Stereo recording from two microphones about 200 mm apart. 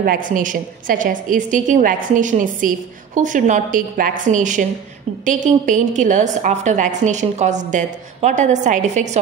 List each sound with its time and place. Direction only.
0.0 s a woman's voice: 45° right (ahead or behind)